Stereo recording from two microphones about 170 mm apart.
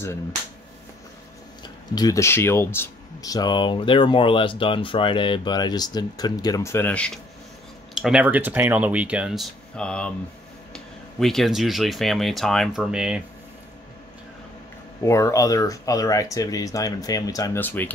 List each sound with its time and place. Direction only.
2.0 s speech: 20° left (ahead or behind)
7.9 s speech: 5° right (ahead or behind)
15.0 s speech: 15° left (ahead or behind)